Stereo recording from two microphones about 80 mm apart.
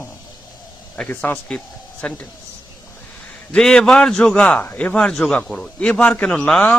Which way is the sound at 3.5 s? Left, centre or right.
Centre.